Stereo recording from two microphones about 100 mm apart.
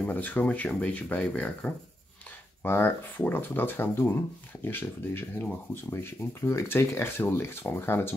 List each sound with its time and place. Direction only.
0.0 s speech: 15° left (ahead or behind)
2.6 s speech: 20° left (ahead or behind)